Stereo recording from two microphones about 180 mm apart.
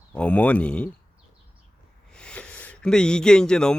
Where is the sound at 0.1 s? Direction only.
5° left (ahead or behind).